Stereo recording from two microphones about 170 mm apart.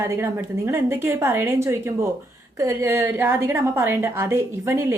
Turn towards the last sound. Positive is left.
turn(degrees=-15)  # may be behind; listen again after turning